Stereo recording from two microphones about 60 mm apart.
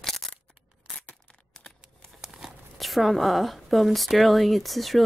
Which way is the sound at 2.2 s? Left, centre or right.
Centre.